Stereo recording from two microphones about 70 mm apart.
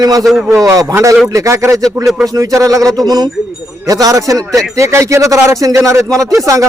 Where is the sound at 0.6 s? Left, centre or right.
Right.